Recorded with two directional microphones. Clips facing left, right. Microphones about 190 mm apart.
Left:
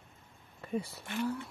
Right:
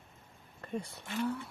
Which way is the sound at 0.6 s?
5° left (ahead or behind).